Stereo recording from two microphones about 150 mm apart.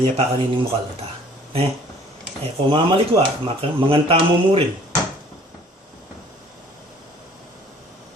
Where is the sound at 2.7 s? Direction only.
35° right (ahead or behind).